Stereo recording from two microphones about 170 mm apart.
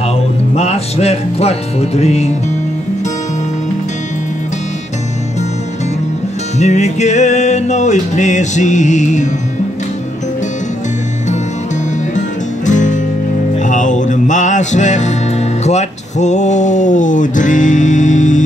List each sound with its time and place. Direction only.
0.6 s music: 40° left (ahead or behind)
6.6 s music: 40° left (ahead or behind)
12.6 s music: 45° left (ahead or behind)